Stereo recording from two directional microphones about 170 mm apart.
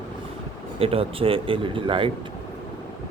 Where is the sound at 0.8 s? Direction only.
35° right (ahead or behind).